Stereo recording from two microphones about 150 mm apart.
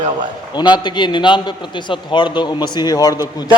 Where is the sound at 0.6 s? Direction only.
30° left (ahead or behind).